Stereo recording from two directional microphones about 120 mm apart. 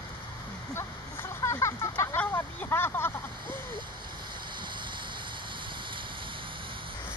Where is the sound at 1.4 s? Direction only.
25° left (ahead or behind).